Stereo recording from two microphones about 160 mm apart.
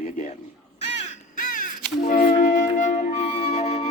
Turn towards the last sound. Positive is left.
turn(degrees=40)  # may be behind; listen again after turning